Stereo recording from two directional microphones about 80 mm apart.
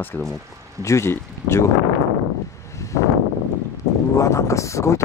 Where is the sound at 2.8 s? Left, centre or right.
Left.